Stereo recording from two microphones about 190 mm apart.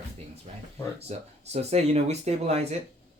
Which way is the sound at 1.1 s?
35° right (ahead or behind).